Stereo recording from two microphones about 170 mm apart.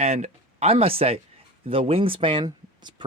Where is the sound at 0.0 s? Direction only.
40° right (ahead or behind).